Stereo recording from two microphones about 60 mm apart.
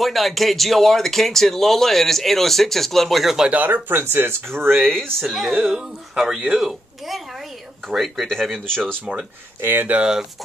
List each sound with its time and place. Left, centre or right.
0.0 s speech: centre
3.6 s speech: right
4.7 s speech: centre
6.6 s a sound: centre
7.9 s speech: centre
9.6 s speech: right